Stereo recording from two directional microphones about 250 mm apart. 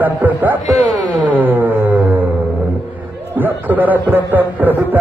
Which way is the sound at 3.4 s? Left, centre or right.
Centre.